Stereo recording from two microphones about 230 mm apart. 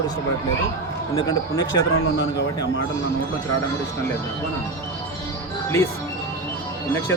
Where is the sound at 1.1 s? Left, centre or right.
Centre.